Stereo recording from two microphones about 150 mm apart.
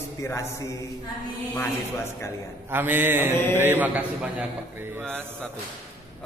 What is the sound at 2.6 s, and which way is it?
Speech, 15° right (ahead or behind).